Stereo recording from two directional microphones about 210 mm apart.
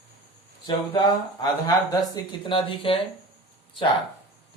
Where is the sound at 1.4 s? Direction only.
15° left (ahead or behind).